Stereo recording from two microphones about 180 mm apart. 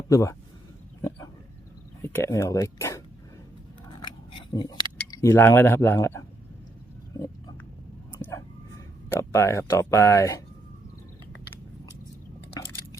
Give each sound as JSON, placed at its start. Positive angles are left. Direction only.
{"t": 0.1, "sound": "speech", "side_deg": 15}
{"t": 2.0, "sound": "speech", "side_deg": 15}
{"t": 4.0, "sound": "a sound", "side_deg": 25}
{"t": 5.1, "sound": "speech", "side_deg": 15}
{"t": 8.3, "sound": "speech", "side_deg": 15}